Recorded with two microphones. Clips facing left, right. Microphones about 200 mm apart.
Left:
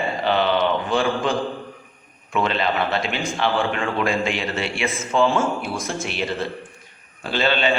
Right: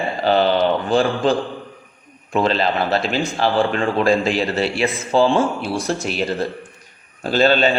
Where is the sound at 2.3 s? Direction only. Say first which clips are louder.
Right 4 dB; 35° right (ahead or behind).